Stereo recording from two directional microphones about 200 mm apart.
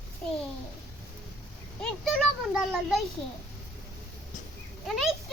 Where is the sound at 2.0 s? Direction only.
Centre (ahead or behind).